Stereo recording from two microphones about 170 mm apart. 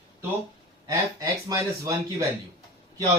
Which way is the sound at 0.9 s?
20° right (ahead or behind).